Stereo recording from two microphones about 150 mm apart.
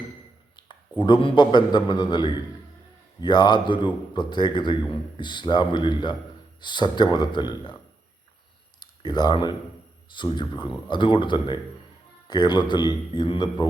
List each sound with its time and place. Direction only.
0.5 s a man's voice: 30° left (ahead or behind)
8.8 s a man's voice: 30° left (ahead or behind)